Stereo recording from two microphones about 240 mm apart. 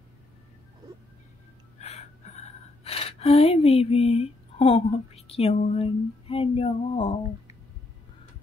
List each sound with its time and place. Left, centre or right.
1.8 s speech: left